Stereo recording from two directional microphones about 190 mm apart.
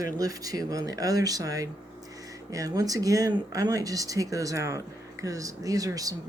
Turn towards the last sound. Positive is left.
turn(degrees=-20)  # may be behind; listen again after turning